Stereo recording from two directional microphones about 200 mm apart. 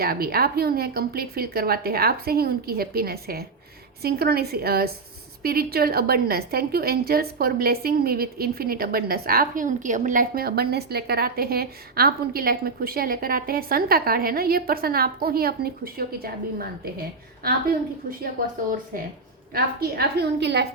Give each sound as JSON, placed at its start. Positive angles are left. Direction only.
{"t": 0.0, "sound": "a woman's voice", "side_deg": -50}
{"t": 19.5, "sound": "a woman's voice", "side_deg": -50}